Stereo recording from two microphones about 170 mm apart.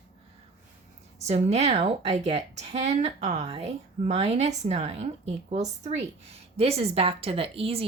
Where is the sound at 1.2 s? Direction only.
40° right (ahead or behind).